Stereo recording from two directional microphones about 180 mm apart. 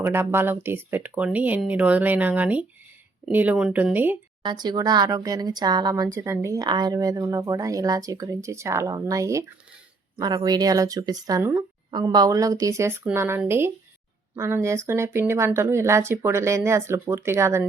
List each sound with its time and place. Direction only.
0.0 s speech: 15° right (ahead or behind)
4.4 s speech: 25° right (ahead or behind)